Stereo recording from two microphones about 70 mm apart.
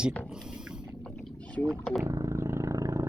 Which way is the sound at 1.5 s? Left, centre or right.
Centre.